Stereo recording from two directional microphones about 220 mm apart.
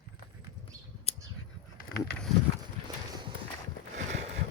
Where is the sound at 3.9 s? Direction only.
30° right (ahead or behind).